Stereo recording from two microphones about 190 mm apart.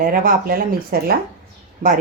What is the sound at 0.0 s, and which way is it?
A woman's voice, 45° right (ahead or behind).